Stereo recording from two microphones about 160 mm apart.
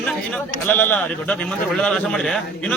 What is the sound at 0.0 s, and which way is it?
A man's voice, 5° left (ahead or behind).